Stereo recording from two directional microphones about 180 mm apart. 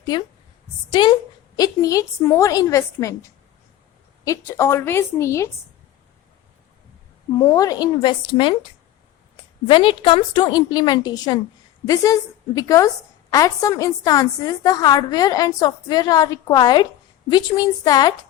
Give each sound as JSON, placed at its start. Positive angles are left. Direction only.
{"t": 0.9, "sound": "a woman's voice", "side_deg": 25}
{"t": 7.3, "sound": "a woman's voice", "side_deg": 20}
{"t": 9.6, "sound": "a woman's voice", "side_deg": 30}